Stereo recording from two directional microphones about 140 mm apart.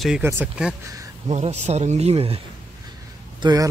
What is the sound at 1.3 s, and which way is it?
Speech, 55° right (ahead or behind).